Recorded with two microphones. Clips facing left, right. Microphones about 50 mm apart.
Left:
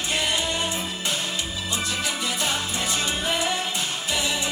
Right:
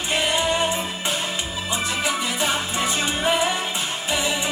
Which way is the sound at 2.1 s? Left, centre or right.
Centre.